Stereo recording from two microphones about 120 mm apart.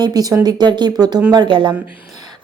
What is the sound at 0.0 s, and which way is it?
A woman's voice, 30° right (ahead or behind).